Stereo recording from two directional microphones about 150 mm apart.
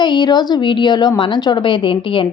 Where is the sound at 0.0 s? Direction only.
30° left (ahead or behind).